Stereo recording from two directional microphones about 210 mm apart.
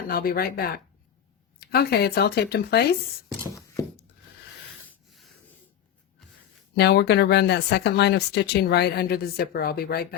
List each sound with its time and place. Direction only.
0.1 s speech: 45° left (ahead or behind)
6.7 s speech: 50° left (ahead or behind)